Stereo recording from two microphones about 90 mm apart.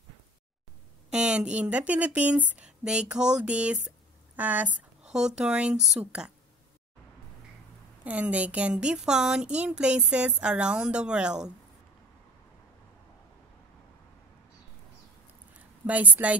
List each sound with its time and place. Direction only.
1.1 s a woman's voice: 10° right (ahead or behind)
5.0 s a woman's voice: 5° right (ahead or behind)
8.0 s a woman's voice: 15° right (ahead or behind)
15.9 s a woman's voice: 15° right (ahead or behind)